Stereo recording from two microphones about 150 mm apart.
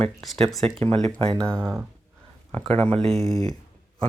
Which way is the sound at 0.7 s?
40° right (ahead or behind).